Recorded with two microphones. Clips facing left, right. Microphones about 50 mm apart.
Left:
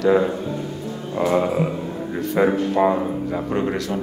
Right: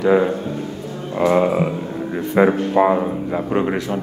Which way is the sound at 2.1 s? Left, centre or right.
Centre.